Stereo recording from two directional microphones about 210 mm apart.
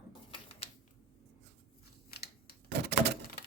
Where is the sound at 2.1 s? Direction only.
50° left (ahead or behind).